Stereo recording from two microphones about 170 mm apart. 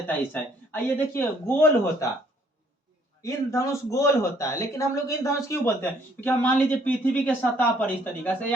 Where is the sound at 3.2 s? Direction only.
15° left (ahead or behind).